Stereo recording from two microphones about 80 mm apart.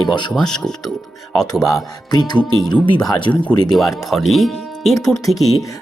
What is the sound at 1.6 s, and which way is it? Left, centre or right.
Speech, left.